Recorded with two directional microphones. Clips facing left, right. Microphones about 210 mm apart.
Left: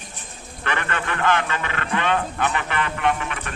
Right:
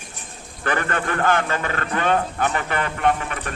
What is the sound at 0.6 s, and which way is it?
Speech, 40° right (ahead or behind).